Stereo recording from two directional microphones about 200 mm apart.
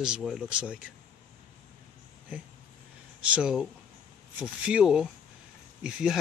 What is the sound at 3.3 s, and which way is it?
Speech, 5° right (ahead or behind).